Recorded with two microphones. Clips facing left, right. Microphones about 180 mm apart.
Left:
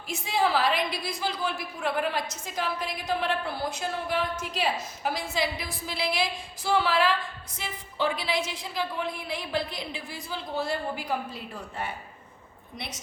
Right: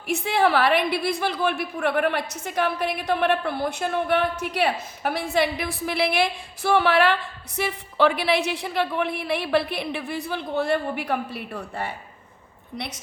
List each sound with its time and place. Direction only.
0.1 s a woman's voice: 65° right (ahead or behind)